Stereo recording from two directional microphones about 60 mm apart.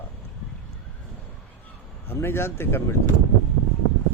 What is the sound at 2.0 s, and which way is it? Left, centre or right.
Speech, left.